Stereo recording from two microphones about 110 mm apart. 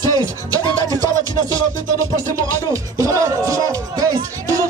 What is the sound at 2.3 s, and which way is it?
Speech, 30° right (ahead or behind).